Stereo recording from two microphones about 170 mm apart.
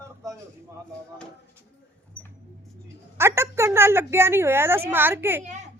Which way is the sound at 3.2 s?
15° right (ahead or behind).